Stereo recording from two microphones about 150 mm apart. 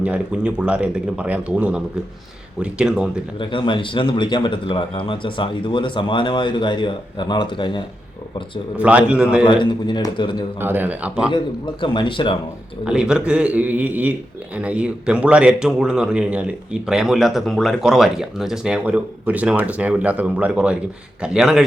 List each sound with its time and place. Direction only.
0.0 s speech: 10° right (ahead or behind)
3.3 s speech: 35° left (ahead or behind)
8.8 s speech: 10° right (ahead or behind)
9.4 s speech: 30° left (ahead or behind)
10.6 s speech: 15° right (ahead or behind)
11.3 s speech: 30° left (ahead or behind)
12.8 s speech: 5° right (ahead or behind)